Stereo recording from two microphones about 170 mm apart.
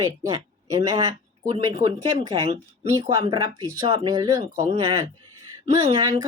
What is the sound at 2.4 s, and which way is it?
Speech, 40° right (ahead or behind).